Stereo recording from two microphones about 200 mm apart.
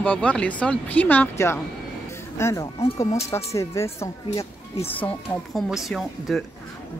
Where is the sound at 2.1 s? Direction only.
15° left (ahead or behind).